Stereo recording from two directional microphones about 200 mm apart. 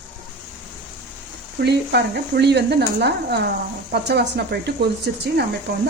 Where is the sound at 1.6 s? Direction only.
55° right (ahead or behind).